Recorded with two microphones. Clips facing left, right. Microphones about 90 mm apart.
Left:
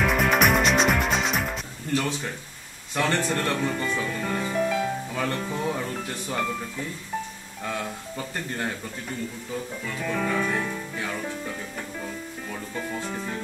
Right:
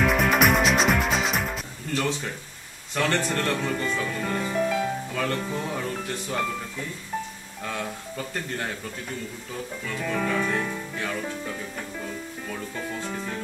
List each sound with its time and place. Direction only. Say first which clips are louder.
0.0 s music: even; centre (ahead or behind)
2.9 s speech: even; 10° left (ahead or behind)
5.1 s music: right 1 dB; 15° left (ahead or behind)
5.4 s speech: left 1 dB; centre (ahead or behind)
9.8 s speech: right 1 dB; centre (ahead or behind)
12.0 s music: even; 5° left (ahead or behind)